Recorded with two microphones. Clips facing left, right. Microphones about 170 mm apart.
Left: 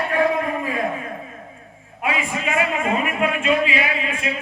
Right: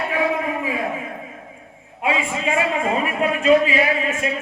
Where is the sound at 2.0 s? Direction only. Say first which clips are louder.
Right 2 dB; 25° right (ahead or behind).